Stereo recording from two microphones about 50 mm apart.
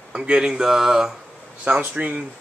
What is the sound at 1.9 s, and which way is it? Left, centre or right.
Speech, right.